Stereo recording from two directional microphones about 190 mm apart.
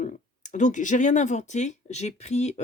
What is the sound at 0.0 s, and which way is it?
Speech, 40° left (ahead or behind).